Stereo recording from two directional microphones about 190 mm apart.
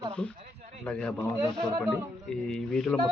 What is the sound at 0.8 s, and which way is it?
Speech, 5° left (ahead or behind).